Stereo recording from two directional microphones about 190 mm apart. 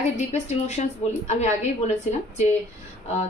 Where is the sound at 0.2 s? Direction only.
35° left (ahead or behind).